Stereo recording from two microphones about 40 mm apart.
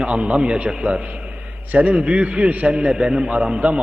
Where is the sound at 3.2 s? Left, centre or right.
Right.